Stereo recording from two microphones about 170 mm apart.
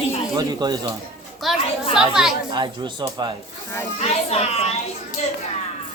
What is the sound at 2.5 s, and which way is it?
Speech, 30° right (ahead or behind).